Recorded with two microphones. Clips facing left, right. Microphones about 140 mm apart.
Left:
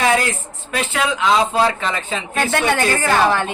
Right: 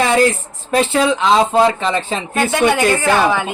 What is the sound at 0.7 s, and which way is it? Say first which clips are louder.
Speech: right 7 dB; 35° right (ahead or behind).